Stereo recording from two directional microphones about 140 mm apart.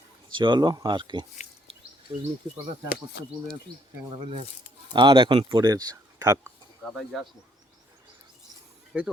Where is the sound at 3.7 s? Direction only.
30° right (ahead or behind).